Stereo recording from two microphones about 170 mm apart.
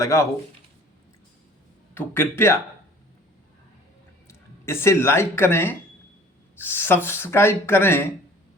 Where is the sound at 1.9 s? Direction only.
15° left (ahead or behind).